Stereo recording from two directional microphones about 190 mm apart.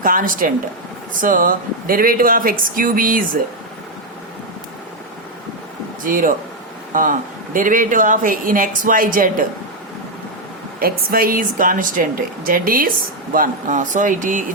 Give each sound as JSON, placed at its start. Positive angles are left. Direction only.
{"t": 0.0, "sound": "speech", "side_deg": -45}
{"t": 6.1, "sound": "speech", "side_deg": -45}
{"t": 10.8, "sound": "speech", "side_deg": -50}